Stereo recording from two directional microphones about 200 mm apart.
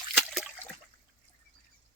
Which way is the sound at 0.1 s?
Centre (ahead or behind).